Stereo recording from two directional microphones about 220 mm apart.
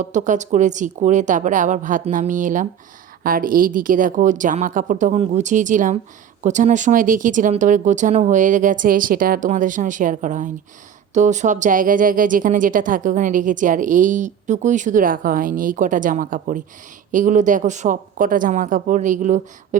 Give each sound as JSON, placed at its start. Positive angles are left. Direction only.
{"t": 0.0, "sound": "a woman's voice", "side_deg": -35}